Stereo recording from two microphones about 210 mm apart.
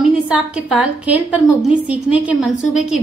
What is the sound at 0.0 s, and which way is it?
A woman's voice, 5° right (ahead or behind).